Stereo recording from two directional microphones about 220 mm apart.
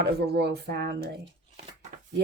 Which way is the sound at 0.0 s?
50° right (ahead or behind).